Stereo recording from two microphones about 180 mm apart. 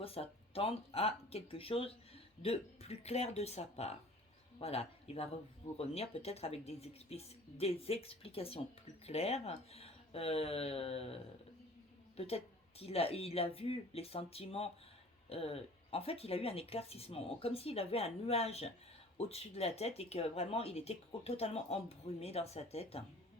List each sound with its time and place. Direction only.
0.0 s speech: 30° left (ahead or behind)
12.1 s a woman's voice: 35° left (ahead or behind)